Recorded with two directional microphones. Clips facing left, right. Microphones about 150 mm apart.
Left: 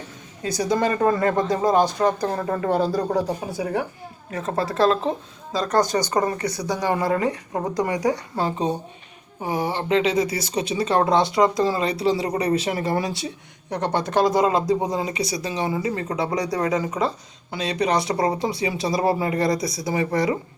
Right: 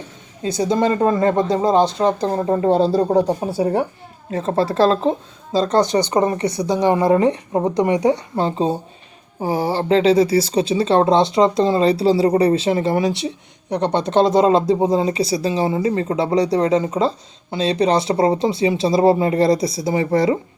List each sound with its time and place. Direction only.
0.4 s speech: 25° right (ahead or behind)